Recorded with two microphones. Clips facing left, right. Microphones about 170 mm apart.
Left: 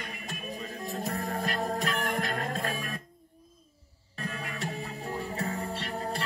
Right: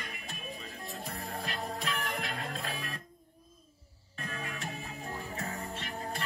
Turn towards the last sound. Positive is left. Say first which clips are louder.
# left 5 dB
turn(degrees=35)  # may be behind; listen again after turning